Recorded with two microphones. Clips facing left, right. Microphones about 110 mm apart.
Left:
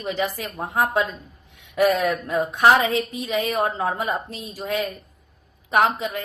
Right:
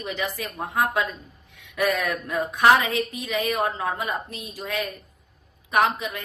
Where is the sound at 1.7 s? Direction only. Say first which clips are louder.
Left 5 dB; 30° left (ahead or behind).